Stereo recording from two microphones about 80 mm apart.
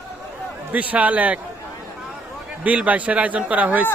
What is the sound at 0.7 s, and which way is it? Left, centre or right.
Speech, centre.